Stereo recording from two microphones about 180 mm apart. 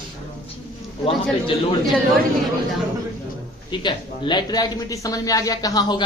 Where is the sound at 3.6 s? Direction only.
25° left (ahead or behind).